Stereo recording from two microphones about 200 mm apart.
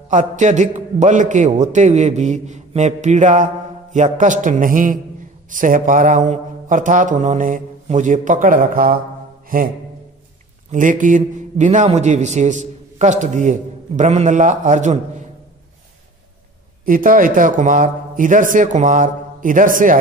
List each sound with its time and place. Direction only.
0.1 s a man's voice: 40° right (ahead or behind)
9.5 s mantra: 45° right (ahead or behind)
10.7 s a man's voice: 40° right (ahead or behind)
16.8 s a man's voice: 45° right (ahead or behind)